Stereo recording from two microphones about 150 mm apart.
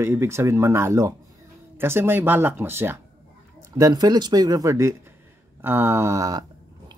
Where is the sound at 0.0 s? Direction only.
15° right (ahead or behind).